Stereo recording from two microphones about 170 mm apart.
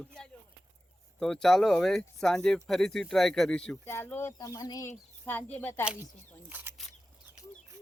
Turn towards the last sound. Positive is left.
turn(degrees=-10)  # may be behind; listen again after turning